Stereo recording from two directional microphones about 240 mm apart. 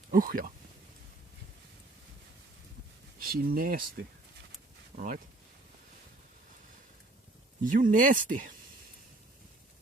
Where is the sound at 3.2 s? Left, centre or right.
Right.